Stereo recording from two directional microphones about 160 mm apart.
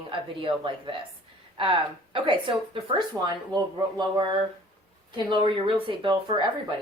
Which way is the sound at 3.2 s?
20° right (ahead or behind).